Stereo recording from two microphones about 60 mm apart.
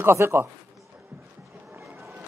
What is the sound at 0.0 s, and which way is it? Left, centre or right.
Speech, right.